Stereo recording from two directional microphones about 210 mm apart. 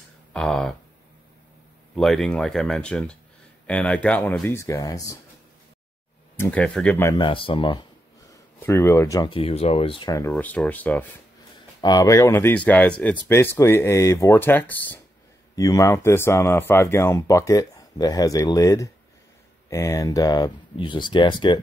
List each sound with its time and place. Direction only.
0.3 s speech: 5° left (ahead or behind)
2.0 s speech: centre (ahead or behind)
6.3 s speech: 10° left (ahead or behind)
7.2 s speech: 25° left (ahead or behind)
8.3 s speech: 10° left (ahead or behind)